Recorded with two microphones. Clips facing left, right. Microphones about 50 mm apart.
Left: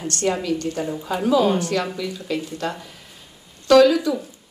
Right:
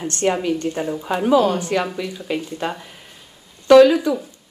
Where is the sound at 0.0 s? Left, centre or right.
Right.